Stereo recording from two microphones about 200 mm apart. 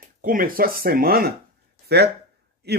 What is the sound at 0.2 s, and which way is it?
Speech, 45° right (ahead or behind).